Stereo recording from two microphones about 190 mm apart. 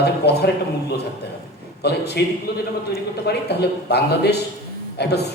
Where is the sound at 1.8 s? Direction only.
60° left (ahead or behind).